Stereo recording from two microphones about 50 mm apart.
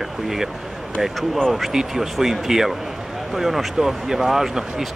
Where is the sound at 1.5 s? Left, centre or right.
Centre.